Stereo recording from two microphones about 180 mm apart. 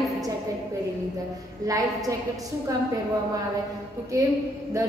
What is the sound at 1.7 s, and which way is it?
Speech, 20° right (ahead or behind).